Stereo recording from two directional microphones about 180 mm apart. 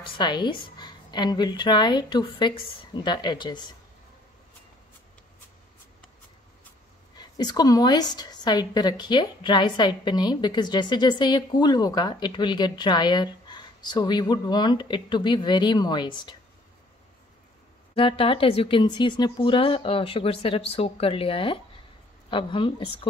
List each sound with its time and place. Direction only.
0.2 s a woman's voice: 25° left (ahead or behind)
7.2 s a woman's voice: 25° left (ahead or behind)
17.9 s a woman's voice: 30° left (ahead or behind)